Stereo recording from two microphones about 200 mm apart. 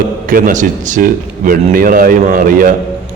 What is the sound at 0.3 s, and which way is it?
A man's voice, 45° right (ahead or behind).